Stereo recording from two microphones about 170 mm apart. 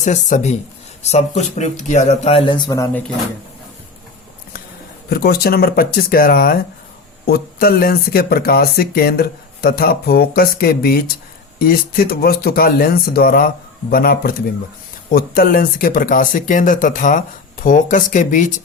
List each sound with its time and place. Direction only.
0.0 s speech: 45° left (ahead or behind); by 3.0 s 15° left (ahead or behind)
5.0 s speech: 65° left (ahead or behind); by 18.6 s 50° left (ahead or behind)